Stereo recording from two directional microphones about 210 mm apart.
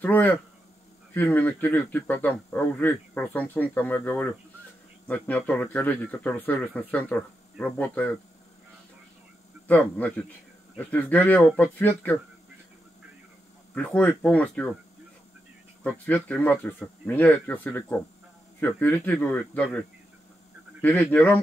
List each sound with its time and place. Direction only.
0.0 s speech: 10° left (ahead or behind)
9.7 s speech: 10° left (ahead or behind)
13.7 s speech: 5° left (ahead or behind)
15.8 s speech: 5° left (ahead or behind)
20.8 s speech: 10° left (ahead or behind)